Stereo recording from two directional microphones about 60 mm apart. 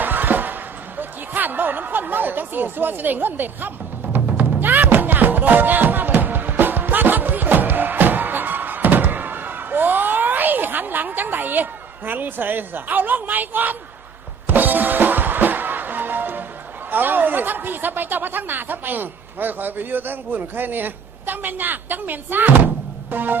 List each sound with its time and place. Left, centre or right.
0.0 s a sound: right
4.1 s music: right
16.9 s speech: right